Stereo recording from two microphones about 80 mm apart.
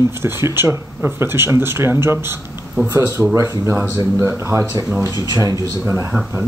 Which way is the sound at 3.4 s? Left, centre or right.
Right.